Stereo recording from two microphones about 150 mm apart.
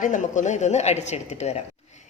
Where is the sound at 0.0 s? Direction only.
55° left (ahead or behind).